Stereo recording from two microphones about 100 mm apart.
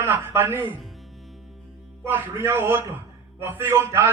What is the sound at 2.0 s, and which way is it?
A man's voice, 25° right (ahead or behind).